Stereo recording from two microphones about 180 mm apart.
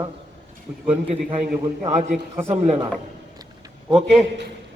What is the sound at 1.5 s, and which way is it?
A man's voice, 40° right (ahead or behind).